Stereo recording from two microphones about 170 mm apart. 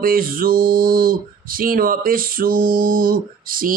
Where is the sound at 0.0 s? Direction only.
55° right (ahead or behind).